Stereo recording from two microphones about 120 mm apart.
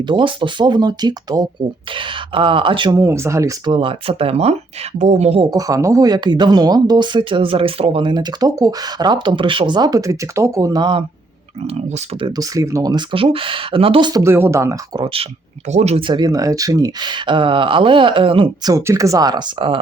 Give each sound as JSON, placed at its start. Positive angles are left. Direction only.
{"t": 0.0, "sound": "speech", "side_deg": -40}
{"t": 1.9, "sound": "speech", "side_deg": -45}
{"t": 2.9, "sound": "speech", "side_deg": -25}
{"t": 3.7, "sound": "speech", "side_deg": -45}
{"t": 4.9, "sound": "speech", "side_deg": -75}
{"t": 5.4, "sound": "speech", "side_deg": -30}
{"t": 11.6, "sound": "speech", "side_deg": -65}
{"t": 12.4, "sound": "speech", "side_deg": -25}
{"t": 14.1, "sound": "speech", "side_deg": -25}
{"t": 14.9, "sound": "speech", "side_deg": -45}
{"t": 15.7, "sound": "speech", "side_deg": -65}
{"t": 16.0, "sound": "speech", "side_deg": -40}
{"t": 18.6, "sound": "speech", "side_deg": -25}